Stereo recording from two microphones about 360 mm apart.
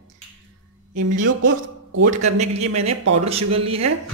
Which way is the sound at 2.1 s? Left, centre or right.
Centre.